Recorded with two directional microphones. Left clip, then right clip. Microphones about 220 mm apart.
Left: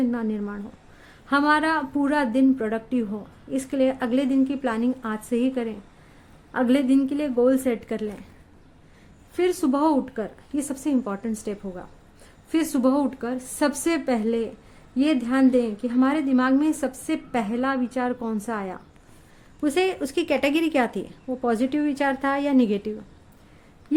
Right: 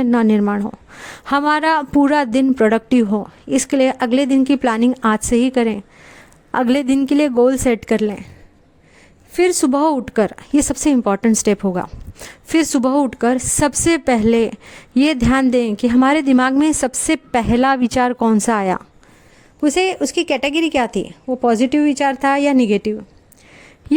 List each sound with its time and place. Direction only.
0.0 s speech: 40° right (ahead or behind)
9.3 s a woman's voice: 35° right (ahead or behind)
19.6 s speech: 30° right (ahead or behind)